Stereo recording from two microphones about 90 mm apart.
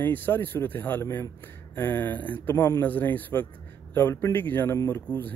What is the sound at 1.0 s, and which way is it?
Speech, 35° left (ahead or behind).